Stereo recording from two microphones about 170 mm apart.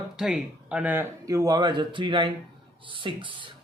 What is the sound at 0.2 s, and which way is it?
Speech, 5° right (ahead or behind).